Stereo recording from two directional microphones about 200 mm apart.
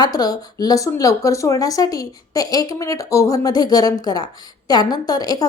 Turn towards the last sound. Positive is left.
turn(degrees=20)  # may be behind; listen again after turning